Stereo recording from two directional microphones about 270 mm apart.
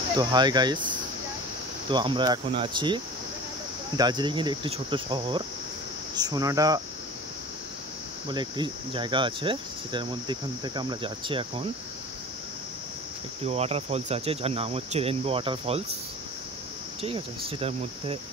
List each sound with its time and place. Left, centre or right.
0.2 s cricket: centre
6.1 s speech: centre
8.3 s cricket: centre
13.5 s cricket: right
17.0 s cricket: right